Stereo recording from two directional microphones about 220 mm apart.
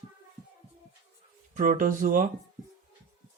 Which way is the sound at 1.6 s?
40° right (ahead or behind).